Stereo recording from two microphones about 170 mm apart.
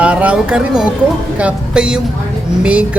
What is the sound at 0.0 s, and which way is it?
Speech, 5° right (ahead or behind).